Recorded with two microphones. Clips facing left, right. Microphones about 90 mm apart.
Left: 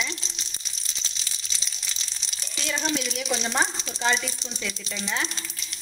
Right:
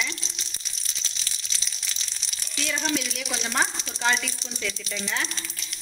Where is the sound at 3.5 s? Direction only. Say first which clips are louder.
Left 1 dB; 15° left (ahead or behind).